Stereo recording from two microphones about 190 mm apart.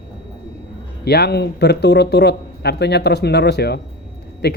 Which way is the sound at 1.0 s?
60° left (ahead or behind).